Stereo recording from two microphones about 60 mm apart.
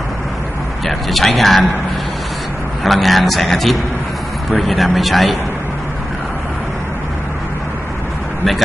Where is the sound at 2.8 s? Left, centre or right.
Centre.